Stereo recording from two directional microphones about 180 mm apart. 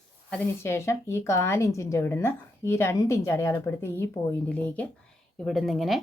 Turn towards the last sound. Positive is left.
turn(degrees=0)  # may be behind; listen again after turning